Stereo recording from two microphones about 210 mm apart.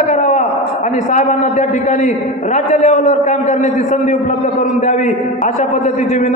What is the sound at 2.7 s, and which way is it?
Speech, 35° left (ahead or behind).